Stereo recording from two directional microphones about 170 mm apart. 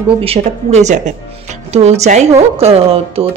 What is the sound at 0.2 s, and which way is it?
A woman's voice, 35° right (ahead or behind).